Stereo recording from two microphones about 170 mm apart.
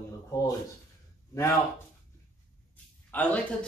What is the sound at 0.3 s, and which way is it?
Speech, 15° left (ahead or behind).